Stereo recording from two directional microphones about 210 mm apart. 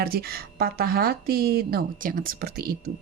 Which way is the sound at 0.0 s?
45° right (ahead or behind).